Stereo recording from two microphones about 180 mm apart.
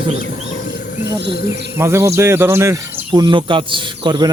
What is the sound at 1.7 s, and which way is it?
Speech, 15° right (ahead or behind).